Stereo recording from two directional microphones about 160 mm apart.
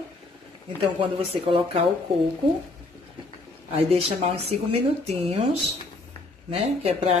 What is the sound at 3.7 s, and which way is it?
Speech, 35° right (ahead or behind).